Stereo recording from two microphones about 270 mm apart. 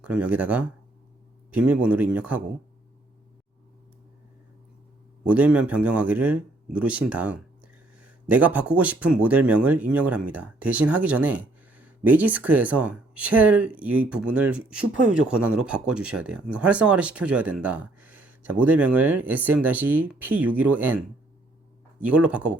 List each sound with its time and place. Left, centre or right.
0.0 s speech: centre
5.3 s speech: centre
22.0 s speech: centre